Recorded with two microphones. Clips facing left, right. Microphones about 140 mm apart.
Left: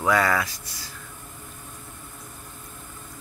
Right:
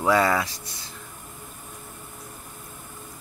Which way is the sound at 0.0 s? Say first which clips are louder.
Right 1 dB; 25° right (ahead or behind).